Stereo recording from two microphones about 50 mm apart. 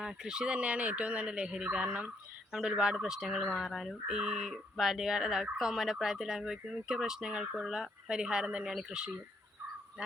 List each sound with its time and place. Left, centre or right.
0.0 s speech: centre
2.5 s speech: centre
3.7 s fowl: centre
4.2 s speech: centre